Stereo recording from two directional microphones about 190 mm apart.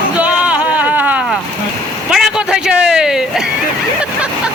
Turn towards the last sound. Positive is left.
turn(degrees=0)  # may be behind; listen again after turning